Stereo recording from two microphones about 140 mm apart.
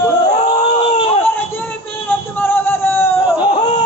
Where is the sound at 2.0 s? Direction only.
15° left (ahead or behind).